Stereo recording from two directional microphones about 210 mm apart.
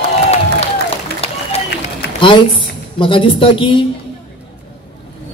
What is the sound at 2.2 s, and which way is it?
A man's voice, 25° left (ahead or behind).